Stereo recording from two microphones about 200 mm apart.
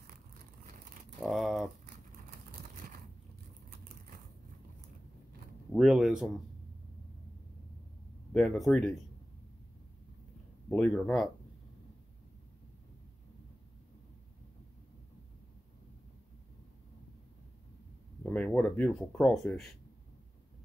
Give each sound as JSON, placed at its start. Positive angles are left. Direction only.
{"t": 1.2, "sound": "a sound", "side_deg": 0}
{"t": 2.7, "sound": "a sound", "side_deg": -40}
{"t": 5.7, "sound": "speech", "side_deg": -5}
{"t": 8.3, "sound": "speech", "side_deg": 5}
{"t": 10.7, "sound": "speech", "side_deg": 5}
{"t": 18.2, "sound": "speech", "side_deg": 5}